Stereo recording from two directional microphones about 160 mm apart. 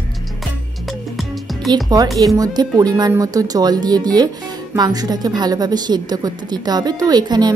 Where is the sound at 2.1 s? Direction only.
25° right (ahead or behind).